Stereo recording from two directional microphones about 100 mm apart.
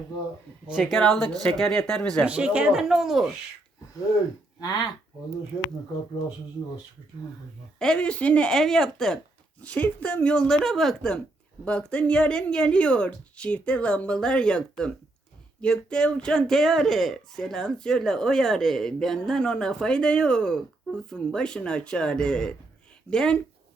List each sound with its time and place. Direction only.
0.7 s speech: centre (ahead or behind)
2.2 s speech: 10° right (ahead or behind)
4.6 s speech: 45° left (ahead or behind)
7.8 s speech: 10° left (ahead or behind)
9.6 s speech: 15° left (ahead or behind)